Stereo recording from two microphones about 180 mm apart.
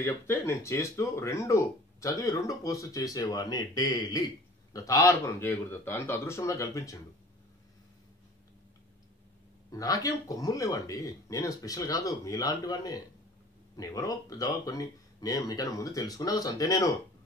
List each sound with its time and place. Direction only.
0.0 s speech: 15° left (ahead or behind)
9.7 s speech: 20° left (ahead or behind)